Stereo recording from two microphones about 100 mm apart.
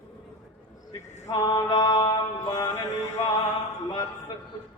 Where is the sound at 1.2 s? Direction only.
45° left (ahead or behind).